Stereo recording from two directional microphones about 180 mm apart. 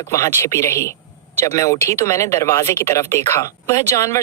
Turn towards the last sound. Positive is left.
turn(degrees=15)  # may be behind; listen again after turning